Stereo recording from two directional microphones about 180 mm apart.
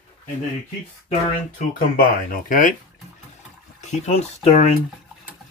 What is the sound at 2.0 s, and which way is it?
Speech, 50° left (ahead or behind).